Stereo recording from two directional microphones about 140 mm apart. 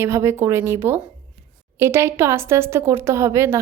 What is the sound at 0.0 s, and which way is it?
A woman's voice, 20° right (ahead or behind).